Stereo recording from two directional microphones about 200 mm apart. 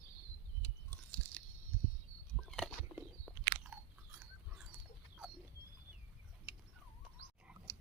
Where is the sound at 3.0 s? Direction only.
10° right (ahead or behind).